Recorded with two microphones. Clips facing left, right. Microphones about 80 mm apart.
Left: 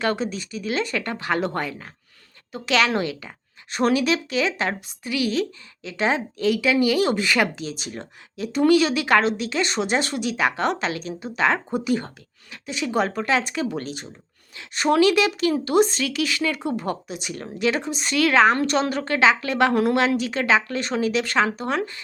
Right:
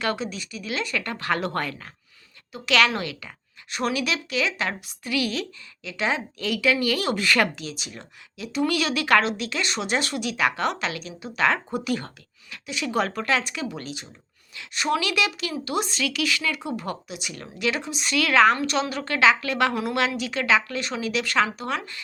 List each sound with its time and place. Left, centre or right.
0.0 s a woman's voice: left